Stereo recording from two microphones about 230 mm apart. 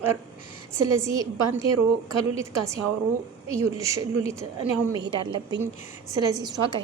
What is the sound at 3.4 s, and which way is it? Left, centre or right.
A woman's voice, centre.